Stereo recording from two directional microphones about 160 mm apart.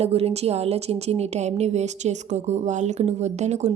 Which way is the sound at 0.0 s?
40° right (ahead or behind).